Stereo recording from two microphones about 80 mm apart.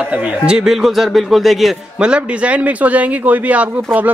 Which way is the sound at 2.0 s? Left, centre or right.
Centre.